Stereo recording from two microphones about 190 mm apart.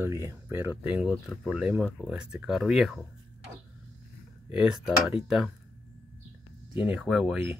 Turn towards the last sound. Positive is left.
turn(degrees=0)  # may be behind; listen again after turning